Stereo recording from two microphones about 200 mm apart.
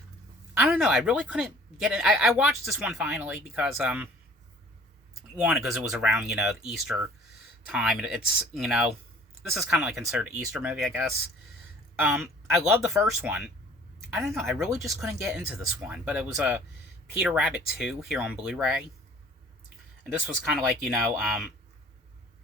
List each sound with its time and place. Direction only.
0.5 s speech: 10° right (ahead or behind)
5.4 s speech: 5° right (ahead or behind)
14.6 s speech: centre (ahead or behind)
20.1 s speech: 5° right (ahead or behind)